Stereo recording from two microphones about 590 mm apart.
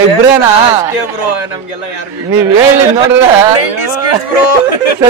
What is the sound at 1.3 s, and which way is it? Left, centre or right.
Speech, left.